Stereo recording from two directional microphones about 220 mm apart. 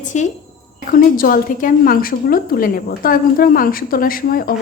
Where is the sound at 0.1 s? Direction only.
35° left (ahead or behind).